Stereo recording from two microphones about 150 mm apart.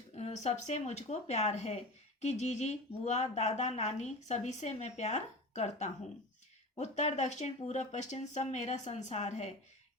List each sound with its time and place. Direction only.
0.1 s speech: 50° left (ahead or behind)